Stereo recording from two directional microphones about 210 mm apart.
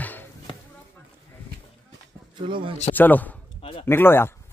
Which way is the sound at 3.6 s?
25° left (ahead or behind).